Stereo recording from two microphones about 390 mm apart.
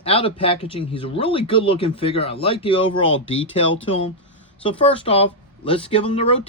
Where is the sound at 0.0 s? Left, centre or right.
Centre.